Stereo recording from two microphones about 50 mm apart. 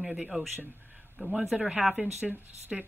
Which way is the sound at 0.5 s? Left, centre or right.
Right.